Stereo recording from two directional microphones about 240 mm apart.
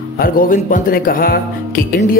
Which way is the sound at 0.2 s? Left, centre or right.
Left.